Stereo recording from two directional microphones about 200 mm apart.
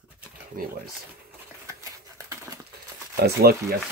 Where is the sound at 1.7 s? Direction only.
15° right (ahead or behind).